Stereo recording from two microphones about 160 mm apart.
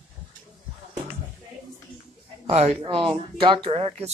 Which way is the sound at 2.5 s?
40° right (ahead or behind).